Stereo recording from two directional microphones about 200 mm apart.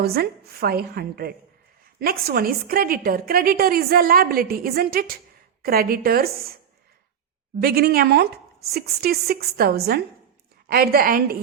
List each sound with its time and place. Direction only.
0.0 s a woman's voice: 50° right (ahead or behind)
7.6 s a woman's voice: 50° right (ahead or behind)